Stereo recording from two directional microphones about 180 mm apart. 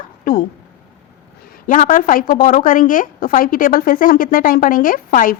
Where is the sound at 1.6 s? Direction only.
50° left (ahead or behind).